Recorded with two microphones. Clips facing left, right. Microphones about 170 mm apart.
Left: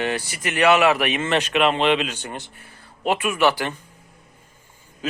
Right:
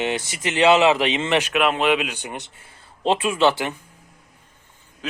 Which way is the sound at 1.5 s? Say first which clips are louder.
Left 3 dB; 5° right (ahead or behind).